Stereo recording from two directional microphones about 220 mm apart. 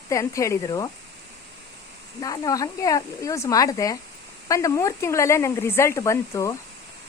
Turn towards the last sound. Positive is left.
turn(degrees=15)  # may be behind; listen again after turning